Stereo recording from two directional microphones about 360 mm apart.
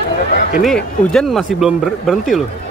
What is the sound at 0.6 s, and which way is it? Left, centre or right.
Speech, centre.